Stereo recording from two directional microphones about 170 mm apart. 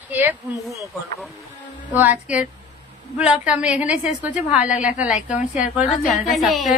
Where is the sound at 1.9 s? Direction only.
10° right (ahead or behind).